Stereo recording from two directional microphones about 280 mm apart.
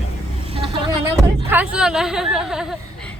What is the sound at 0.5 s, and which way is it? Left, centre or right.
Vehicle, centre.